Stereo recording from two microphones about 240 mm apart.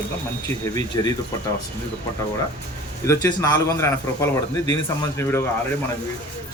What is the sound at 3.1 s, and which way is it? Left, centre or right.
Speech, centre.